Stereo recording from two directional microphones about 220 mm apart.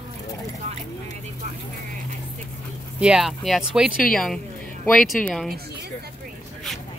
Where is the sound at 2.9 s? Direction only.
5° right (ahead or behind).